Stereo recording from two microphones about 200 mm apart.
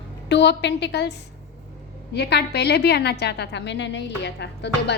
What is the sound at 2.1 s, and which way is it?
A woman's voice, 55° left (ahead or behind).